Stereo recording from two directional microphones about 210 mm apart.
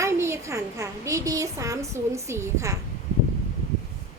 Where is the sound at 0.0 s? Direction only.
15° right (ahead or behind).